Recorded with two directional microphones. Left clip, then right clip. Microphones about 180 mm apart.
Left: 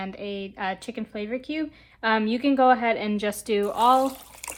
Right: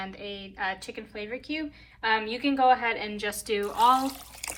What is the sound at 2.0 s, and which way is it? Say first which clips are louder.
Speech: left 3 dB; 40° left (ahead or behind).